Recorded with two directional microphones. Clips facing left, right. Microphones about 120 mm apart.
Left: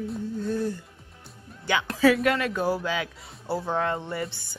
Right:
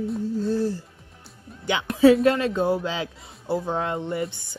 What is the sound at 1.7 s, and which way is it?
Speech, 20° right (ahead or behind).